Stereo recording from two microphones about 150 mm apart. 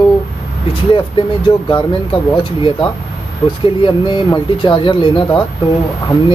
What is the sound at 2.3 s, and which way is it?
Speech, 35° left (ahead or behind).